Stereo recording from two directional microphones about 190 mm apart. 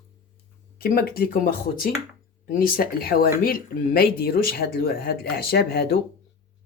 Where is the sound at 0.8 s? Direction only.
55° left (ahead or behind).